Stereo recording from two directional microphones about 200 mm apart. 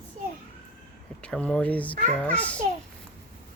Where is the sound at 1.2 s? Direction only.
5° left (ahead or behind).